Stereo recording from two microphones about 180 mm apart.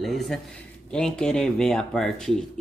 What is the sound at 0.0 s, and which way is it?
A man's voice, centre (ahead or behind).